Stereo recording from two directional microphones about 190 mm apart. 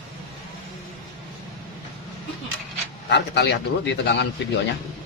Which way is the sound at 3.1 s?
60° left (ahead or behind).